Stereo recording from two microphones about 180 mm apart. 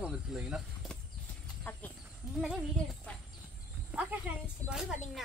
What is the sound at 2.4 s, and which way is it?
Speech, centre (ahead or behind).